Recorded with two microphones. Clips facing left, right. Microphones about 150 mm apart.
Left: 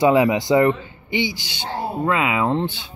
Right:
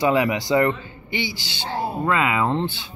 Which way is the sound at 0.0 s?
20° left (ahead or behind).